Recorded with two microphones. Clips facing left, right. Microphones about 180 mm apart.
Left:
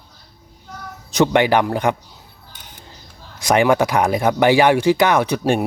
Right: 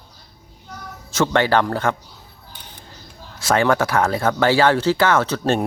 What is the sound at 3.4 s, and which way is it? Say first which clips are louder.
Speech: left 3 dB; 15° left (ahead or behind).